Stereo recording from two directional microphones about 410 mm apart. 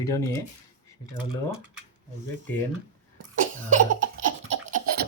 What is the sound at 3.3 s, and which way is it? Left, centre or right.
Cough, centre.